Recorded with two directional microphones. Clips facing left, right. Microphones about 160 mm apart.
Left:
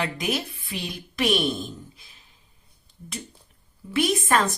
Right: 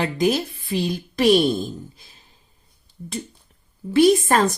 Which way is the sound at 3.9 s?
30° right (ahead or behind).